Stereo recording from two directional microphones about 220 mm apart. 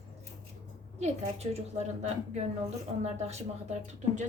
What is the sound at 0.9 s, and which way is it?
A woman's voice, 30° right (ahead or behind).